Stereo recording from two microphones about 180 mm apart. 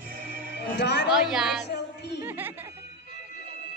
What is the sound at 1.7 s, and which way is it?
Music, 70° left (ahead or behind).